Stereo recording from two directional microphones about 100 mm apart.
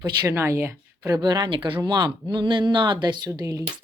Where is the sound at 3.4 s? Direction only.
30° right (ahead or behind).